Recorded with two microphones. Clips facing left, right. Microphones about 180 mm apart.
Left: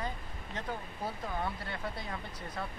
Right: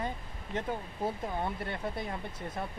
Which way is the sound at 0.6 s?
25° right (ahead or behind).